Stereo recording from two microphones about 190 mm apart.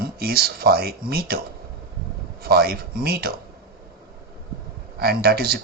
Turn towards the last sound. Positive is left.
turn(degrees=-55)  # may be behind; listen again after turning